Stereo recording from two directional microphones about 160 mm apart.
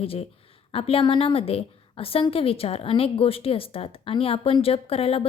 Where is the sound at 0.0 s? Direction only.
35° left (ahead or behind).